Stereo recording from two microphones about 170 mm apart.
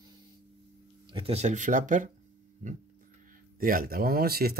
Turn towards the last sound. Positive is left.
turn(degrees=-65)  # may be behind; listen again after turning